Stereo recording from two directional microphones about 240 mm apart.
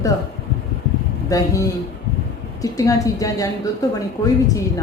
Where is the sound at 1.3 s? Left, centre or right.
Centre.